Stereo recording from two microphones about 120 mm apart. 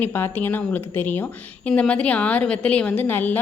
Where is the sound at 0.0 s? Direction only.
20° left (ahead or behind).